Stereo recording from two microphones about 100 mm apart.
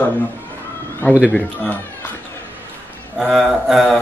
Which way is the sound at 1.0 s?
20° left (ahead or behind).